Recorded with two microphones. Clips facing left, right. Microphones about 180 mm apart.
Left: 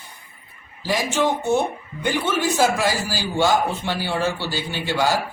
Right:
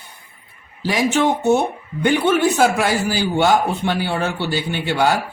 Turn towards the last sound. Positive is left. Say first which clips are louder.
# right 3 dB
turn(degrees=-60)  # may be behind; listen again after turning